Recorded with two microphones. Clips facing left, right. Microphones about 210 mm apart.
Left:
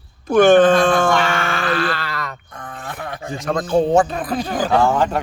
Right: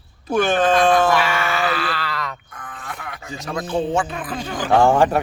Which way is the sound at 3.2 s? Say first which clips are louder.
Left 5 dB; 50° left (ahead or behind).